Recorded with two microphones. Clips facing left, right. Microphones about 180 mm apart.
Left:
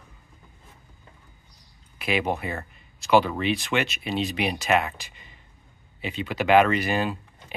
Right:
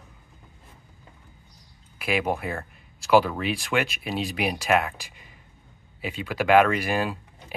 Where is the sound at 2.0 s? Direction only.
5° right (ahead or behind).